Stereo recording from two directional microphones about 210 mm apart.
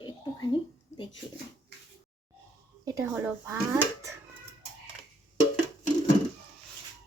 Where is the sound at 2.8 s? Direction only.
10° right (ahead or behind).